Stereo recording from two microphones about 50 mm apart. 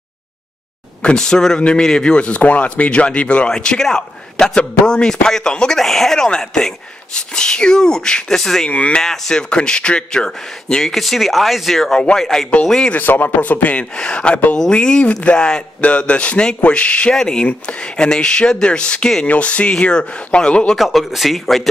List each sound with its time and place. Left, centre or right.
1.0 s speech: centre
5.8 s speech: centre
8.6 s speech: left
9.0 s speech: centre
12.9 s speech: left
13.9 s speech: centre
17.1 s speech: centre
17.5 s speech: left
20.7 s speech: centre